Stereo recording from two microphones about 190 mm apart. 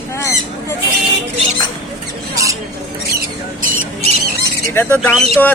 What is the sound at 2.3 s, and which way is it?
Rodents, 15° right (ahead or behind).